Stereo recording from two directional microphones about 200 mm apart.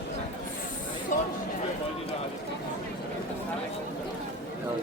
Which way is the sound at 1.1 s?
40° left (ahead or behind).